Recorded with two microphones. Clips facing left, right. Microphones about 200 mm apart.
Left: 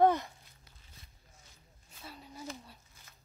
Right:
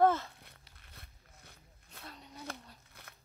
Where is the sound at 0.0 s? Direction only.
15° left (ahead or behind).